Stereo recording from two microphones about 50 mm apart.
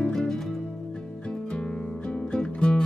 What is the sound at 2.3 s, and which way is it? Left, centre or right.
Music, centre.